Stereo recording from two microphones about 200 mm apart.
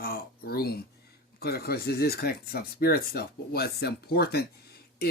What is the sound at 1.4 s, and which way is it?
Speech, 50° left (ahead or behind).